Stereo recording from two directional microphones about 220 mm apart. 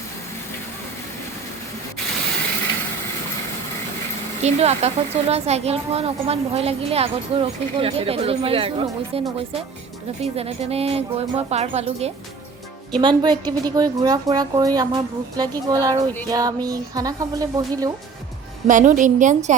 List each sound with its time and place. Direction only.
4.4 s a woman's voice: 30° right (ahead or behind)
18.7 s a woman's voice: 35° right (ahead or behind)